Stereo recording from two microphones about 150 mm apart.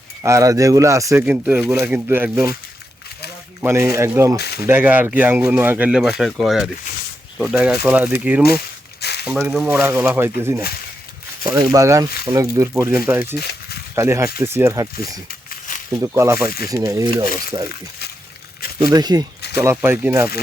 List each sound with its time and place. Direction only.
0.2 s speech: 20° right (ahead or behind)
1.2 s speech: 10° right (ahead or behind)
3.6 s speech: 15° right (ahead or behind)
4.4 s speech: 90° left
4.6 s speech: 15° right (ahead or behind)
9.0 s a sound: 90° left
9.2 s speech: 5° right (ahead or behind)
9.8 s speech: 15° right (ahead or behind)
11.7 s speech: 20° right (ahead or behind)
13.4 s a sound: 90° left
13.9 s speech: 20° right (ahead or behind)
15.3 s a sound: 60° left (ahead or behind)
16.0 s speech: 20° right (ahead or behind)
18.8 s speech: 25° right (ahead or behind)